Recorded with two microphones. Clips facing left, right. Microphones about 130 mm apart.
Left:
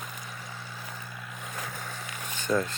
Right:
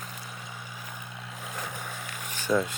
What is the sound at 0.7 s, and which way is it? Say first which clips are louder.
Vehicle: even; 15° right (ahead or behind).